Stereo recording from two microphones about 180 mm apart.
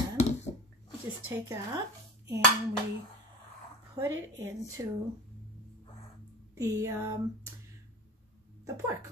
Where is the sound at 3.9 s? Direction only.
15° right (ahead or behind).